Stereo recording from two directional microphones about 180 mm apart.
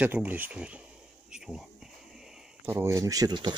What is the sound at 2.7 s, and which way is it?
Speech, 15° right (ahead or behind).